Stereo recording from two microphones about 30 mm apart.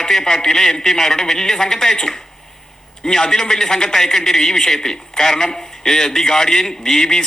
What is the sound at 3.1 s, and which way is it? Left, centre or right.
A man's voice, left.